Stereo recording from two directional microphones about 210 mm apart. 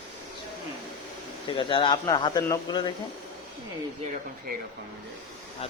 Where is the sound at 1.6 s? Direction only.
25° left (ahead or behind).